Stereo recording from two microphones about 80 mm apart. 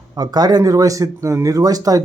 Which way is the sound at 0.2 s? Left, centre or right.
Right.